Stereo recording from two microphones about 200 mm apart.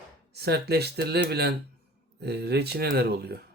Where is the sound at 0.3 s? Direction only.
55° right (ahead or behind).